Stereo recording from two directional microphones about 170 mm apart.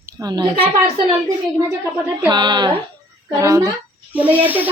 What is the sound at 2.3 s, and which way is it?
A woman's voice, 25° right (ahead or behind).